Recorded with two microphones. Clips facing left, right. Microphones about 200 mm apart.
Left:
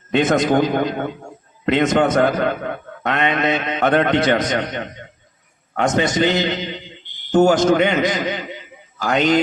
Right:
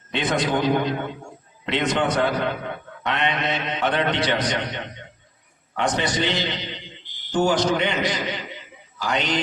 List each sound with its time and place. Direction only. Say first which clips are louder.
0.1 s a man's voice: left 7 dB; 45° left (ahead or behind)